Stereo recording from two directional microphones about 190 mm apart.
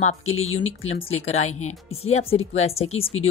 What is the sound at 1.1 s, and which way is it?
Speech, 35° left (ahead or behind).